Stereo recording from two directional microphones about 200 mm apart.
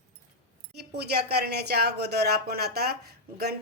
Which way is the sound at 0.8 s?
55° right (ahead or behind).